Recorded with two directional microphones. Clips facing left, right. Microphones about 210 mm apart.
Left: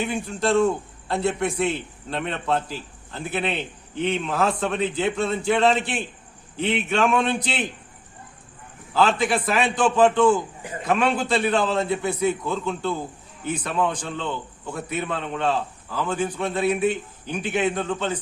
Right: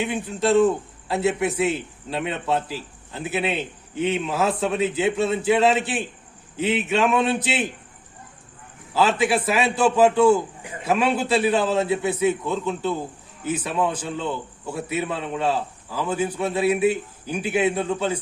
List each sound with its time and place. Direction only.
0.0 s a man's voice: centre (ahead or behind)
8.9 s a man's voice: 5° right (ahead or behind)